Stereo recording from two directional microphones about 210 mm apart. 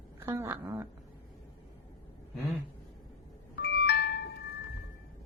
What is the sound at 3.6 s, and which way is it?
Music, 50° left (ahead or behind).